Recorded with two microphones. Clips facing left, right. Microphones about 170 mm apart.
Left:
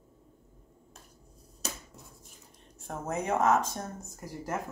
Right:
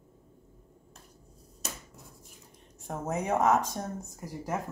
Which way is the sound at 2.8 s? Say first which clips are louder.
Right 1 dB; 15° right (ahead or behind).